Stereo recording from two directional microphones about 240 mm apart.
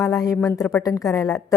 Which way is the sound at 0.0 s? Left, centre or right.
Centre.